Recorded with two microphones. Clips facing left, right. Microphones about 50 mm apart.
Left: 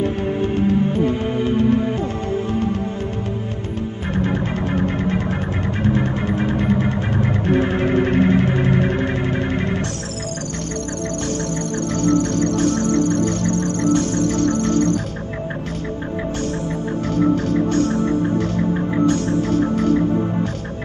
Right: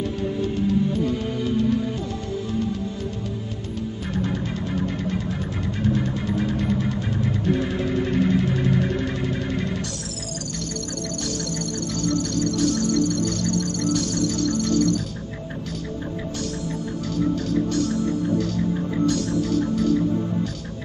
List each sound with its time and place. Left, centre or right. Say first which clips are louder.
0.0 s music: left 5 dB; left
4.2 s music: left 6 dB; left
11.9 s music: left 7 dB; left
17.1 s music: left 5 dB; left